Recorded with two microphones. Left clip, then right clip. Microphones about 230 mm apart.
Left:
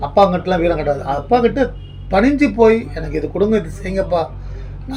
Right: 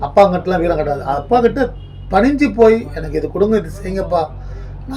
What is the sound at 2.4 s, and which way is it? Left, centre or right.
Speech, centre.